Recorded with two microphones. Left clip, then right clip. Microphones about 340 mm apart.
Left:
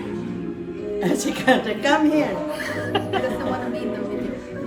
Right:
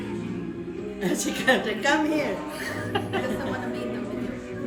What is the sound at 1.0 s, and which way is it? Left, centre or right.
A woman's voice, centre.